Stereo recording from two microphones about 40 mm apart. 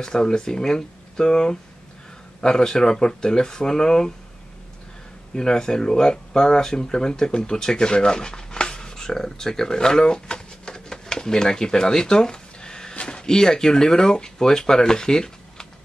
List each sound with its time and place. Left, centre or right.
0.0 s speech: centre
5.3 s speech: centre